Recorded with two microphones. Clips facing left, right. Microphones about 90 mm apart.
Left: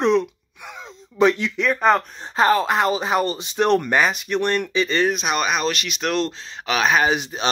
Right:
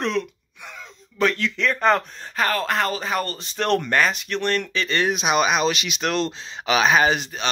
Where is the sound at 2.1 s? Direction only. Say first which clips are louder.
Left 6 dB; 25° left (ahead or behind).